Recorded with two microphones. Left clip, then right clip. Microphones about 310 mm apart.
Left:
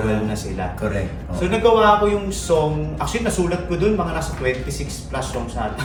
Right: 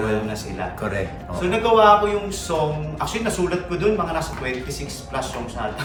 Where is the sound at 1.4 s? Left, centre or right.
Centre.